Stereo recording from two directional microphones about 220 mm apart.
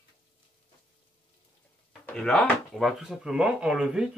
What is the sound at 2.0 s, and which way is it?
Speech, 5° left (ahead or behind).